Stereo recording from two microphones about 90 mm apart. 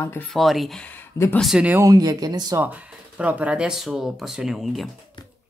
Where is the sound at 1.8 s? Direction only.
45° right (ahead or behind).